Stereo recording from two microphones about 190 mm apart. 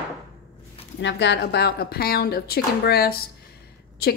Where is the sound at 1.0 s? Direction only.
65° left (ahead or behind).